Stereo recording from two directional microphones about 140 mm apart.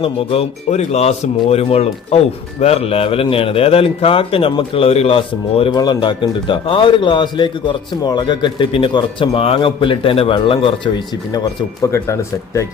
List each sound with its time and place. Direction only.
0.0 s a man's voice: 45° left (ahead or behind)
11.8 s speech: 20° left (ahead or behind)